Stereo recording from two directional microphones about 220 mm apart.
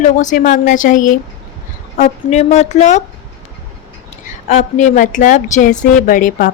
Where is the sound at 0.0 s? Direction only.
35° left (ahead or behind).